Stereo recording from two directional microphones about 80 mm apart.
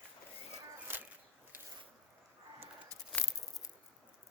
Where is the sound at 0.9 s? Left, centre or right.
Right.